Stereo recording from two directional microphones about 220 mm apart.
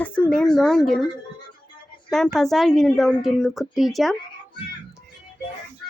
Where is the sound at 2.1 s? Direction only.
Centre (ahead or behind).